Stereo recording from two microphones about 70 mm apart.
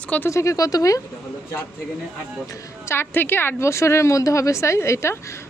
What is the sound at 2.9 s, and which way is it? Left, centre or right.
A woman's voice, left.